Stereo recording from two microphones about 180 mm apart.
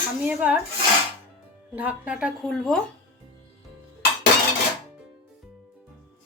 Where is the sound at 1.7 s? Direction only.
10° right (ahead or behind).